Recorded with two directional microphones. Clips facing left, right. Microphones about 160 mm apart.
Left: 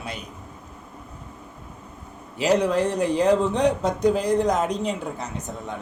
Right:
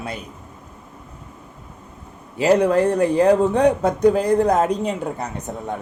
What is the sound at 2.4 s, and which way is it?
Speech, 55° right (ahead or behind).